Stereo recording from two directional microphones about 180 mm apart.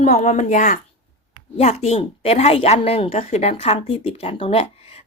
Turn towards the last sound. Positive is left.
turn(degrees=35)  # may be behind; listen again after turning